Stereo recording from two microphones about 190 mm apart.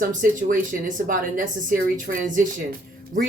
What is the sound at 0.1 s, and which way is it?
Speech, 45° right (ahead or behind).